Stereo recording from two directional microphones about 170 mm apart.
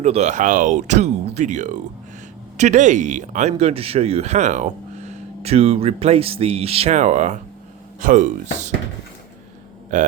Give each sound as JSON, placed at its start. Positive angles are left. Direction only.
{"t": 0.0, "sound": "speech", "side_deg": -40}
{"t": 9.9, "sound": "speech", "side_deg": -45}